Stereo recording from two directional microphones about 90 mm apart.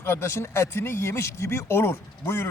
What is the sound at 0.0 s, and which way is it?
Speech, 30° left (ahead or behind).